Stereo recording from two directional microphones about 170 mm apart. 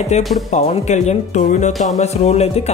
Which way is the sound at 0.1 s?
40° left (ahead or behind).